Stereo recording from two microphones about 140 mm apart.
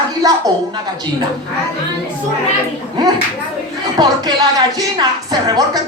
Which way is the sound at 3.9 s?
30° right (ahead or behind).